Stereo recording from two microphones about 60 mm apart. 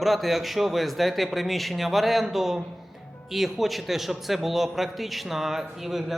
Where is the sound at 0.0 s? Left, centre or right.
Centre.